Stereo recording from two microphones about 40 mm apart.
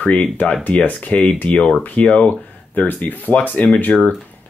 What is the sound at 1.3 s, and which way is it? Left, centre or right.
Speech, left.